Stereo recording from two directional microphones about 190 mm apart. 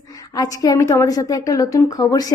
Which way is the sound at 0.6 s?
20° left (ahead or behind).